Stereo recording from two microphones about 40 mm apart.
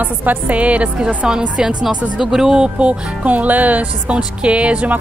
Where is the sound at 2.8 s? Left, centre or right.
Right.